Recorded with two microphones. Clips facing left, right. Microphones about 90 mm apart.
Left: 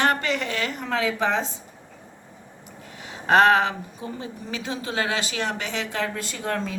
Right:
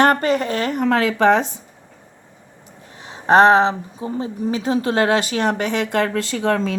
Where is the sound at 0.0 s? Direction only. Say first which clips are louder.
Right 7 dB; 45° right (ahead or behind); by 1.5 s 70° right (ahead or behind).